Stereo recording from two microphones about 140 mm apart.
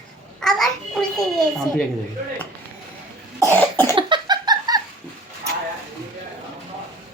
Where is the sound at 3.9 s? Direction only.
35° right (ahead or behind).